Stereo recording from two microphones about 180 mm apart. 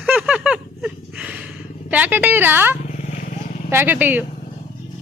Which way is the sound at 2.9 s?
40° left (ahead or behind).